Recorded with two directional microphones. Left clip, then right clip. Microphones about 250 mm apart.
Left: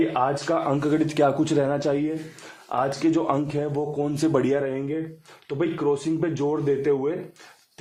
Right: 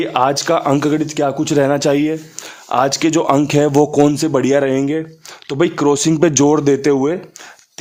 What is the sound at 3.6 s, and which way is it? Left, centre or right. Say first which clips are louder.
Speech: right 14 dB; right.